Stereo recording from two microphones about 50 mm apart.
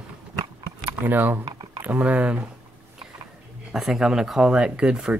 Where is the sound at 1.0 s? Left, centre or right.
Right.